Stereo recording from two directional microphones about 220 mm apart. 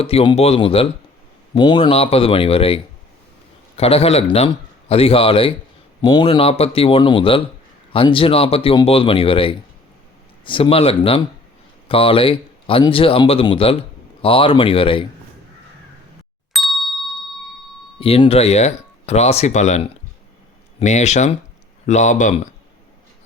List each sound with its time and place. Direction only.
0.0 s speech: 25° left (ahead or behind)
16.5 s ding: centre (ahead or behind)
18.0 s speech: 25° left (ahead or behind)